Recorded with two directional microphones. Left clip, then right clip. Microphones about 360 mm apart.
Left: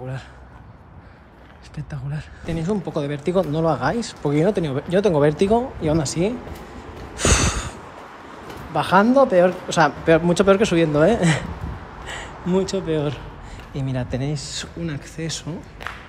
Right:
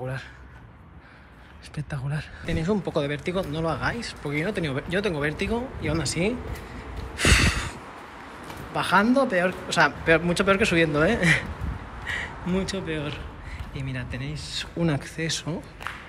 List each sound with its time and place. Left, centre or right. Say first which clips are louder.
1.9 s speech: right 2 dB; centre
7.2 s a sound: left 1 dB; centre
8.7 s speech: left 5 dB; centre
14.8 s a man's voice: right 3 dB; centre